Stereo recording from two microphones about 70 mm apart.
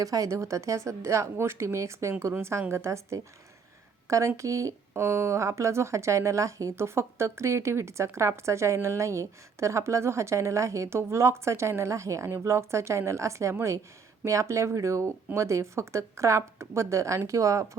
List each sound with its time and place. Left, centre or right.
0.0 s a woman's voice: right
4.4 s speech: right